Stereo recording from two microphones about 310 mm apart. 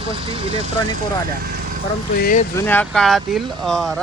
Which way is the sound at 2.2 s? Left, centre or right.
Left.